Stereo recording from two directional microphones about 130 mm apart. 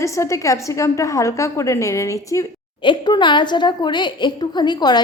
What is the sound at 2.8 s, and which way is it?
A woman's voice, 35° left (ahead or behind).